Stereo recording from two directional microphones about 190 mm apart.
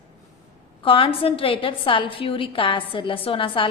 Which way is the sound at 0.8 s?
30° left (ahead or behind).